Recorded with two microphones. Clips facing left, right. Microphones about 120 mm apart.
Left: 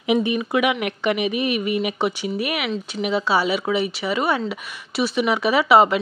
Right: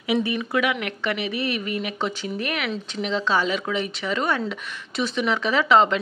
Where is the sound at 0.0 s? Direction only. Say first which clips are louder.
Left 3 dB; 20° left (ahead or behind).